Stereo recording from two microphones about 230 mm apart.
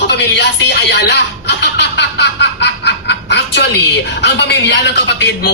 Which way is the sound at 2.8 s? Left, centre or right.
Left.